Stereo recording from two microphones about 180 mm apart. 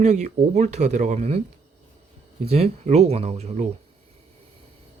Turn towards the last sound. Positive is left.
turn(degrees=-40)  # may be behind; listen again after turning